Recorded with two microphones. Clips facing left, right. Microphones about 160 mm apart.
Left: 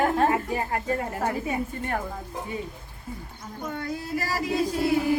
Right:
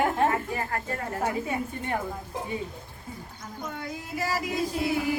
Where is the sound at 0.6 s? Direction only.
15° left (ahead or behind).